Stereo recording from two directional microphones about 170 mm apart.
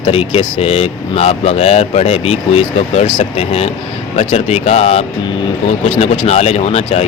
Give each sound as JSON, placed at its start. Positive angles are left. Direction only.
{"t": 0.0, "sound": "speech", "side_deg": 35}